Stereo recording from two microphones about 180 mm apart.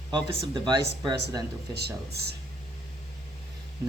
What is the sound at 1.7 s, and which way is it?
Speech, 65° right (ahead or behind).